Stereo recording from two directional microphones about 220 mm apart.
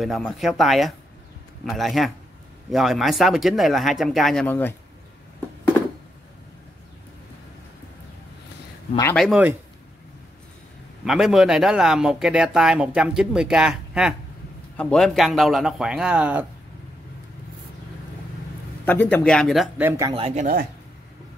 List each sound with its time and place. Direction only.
0.0 s speech: centre (ahead or behind)
9.1 s speech: centre (ahead or behind)
11.1 s speech: centre (ahead or behind)
18.9 s speech: 10° left (ahead or behind); by 20.1 s 10° right (ahead or behind)
20.1 s speech: 25° right (ahead or behind)